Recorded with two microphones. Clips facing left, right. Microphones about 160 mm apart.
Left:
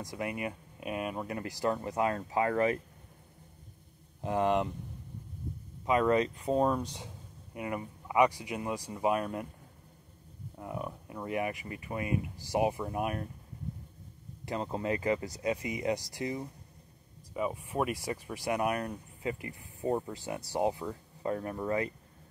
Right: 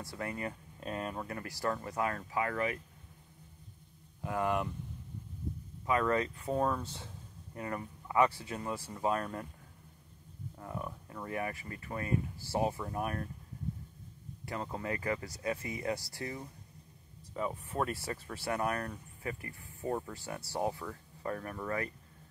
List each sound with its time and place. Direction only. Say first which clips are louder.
0.0 s speech: left 3 dB; 15° left (ahead or behind); by 2.8 s 35° left (ahead or behind)
4.2 s speech: left 4 dB; 25° left (ahead or behind)
5.9 s speech: left 4 dB; 20° left (ahead or behind)
10.6 s speech: left 3 dB; 15° left (ahead or behind)
14.4 s speech: left 5 dB; 20° left (ahead or behind)